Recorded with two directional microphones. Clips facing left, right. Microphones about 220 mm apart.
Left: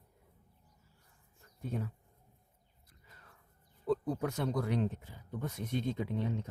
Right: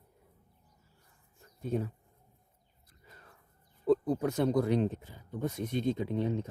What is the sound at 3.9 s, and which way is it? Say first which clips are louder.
Speech: right 5 dB; 25° right (ahead or behind).